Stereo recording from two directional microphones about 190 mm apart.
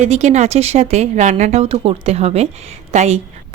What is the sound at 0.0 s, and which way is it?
Speech, 35° right (ahead or behind).